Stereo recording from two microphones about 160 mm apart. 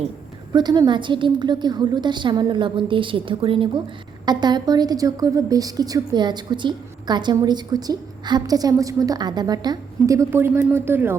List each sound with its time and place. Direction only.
0.5 s a woman's voice: 25° right (ahead or behind)